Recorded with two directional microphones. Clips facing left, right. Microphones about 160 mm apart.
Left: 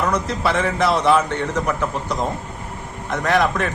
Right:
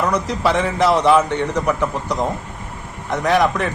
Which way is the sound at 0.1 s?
15° right (ahead or behind).